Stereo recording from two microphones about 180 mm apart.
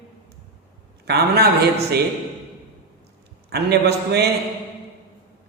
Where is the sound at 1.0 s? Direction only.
65° right (ahead or behind).